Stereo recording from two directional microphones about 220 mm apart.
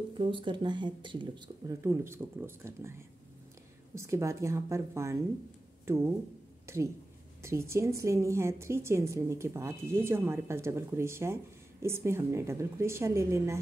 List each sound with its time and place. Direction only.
0.2 s a woman's voice: 20° right (ahead or behind)